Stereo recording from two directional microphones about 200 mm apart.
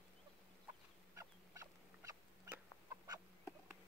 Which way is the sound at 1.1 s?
15° right (ahead or behind).